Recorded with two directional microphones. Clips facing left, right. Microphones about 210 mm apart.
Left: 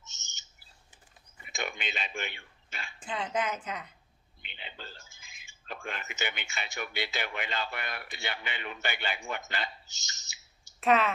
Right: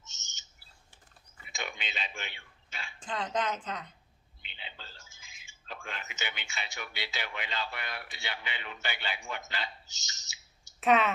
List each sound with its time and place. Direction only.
1.5 s a sound: 55° left (ahead or behind)
3.0 s a woman's voice: 10° left (ahead or behind)
4.4 s a man's voice: 50° left (ahead or behind)
10.8 s speech: centre (ahead or behind)